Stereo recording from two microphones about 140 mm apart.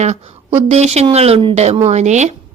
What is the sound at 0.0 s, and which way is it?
A woman's voice, 55° right (ahead or behind).